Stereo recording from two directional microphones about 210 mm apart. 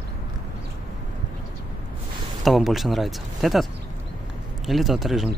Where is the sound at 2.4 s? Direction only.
Centre (ahead or behind).